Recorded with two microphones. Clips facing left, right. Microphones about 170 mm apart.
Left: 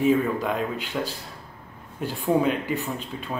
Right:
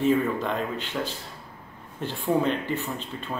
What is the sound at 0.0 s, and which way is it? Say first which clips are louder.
Speech: left 2 dB; 5° left (ahead or behind).